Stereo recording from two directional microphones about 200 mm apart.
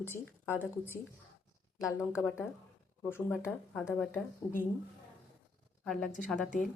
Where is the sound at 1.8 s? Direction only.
15° left (ahead or behind).